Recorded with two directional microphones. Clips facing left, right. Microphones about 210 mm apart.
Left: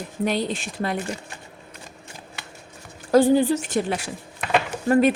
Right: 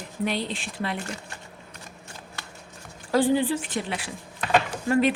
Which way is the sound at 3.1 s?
45° left (ahead or behind).